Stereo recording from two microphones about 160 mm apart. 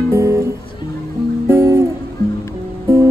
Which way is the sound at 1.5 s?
15° right (ahead or behind).